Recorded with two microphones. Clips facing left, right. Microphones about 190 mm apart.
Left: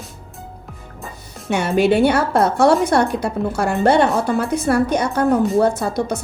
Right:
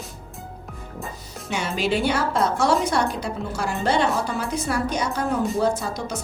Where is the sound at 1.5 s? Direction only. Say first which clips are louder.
Left 8 dB; 60° left (ahead or behind).